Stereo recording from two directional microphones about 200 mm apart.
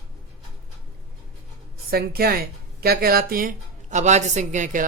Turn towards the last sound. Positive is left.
turn(degrees=-40)  # may be behind; listen again after turning